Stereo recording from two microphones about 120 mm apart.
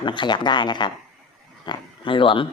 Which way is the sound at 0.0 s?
40° left (ahead or behind).